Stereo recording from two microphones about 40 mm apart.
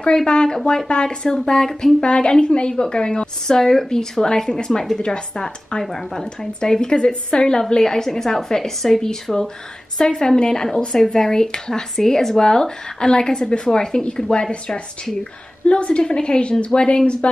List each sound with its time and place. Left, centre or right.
0.0 s a woman's voice: left
2.0 s a woman's voice: left
15.6 s a woman's voice: left